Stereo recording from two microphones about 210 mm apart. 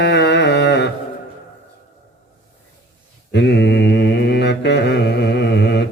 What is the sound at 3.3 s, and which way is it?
Mantra, 55° left (ahead or behind).